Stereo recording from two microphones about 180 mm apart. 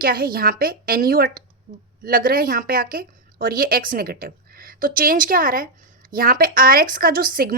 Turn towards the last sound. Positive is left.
turn(degrees=-55)  # may be behind; listen again after turning